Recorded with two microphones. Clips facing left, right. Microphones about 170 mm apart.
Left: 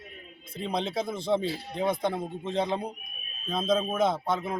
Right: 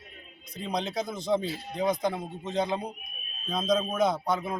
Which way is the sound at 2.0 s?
5° left (ahead or behind).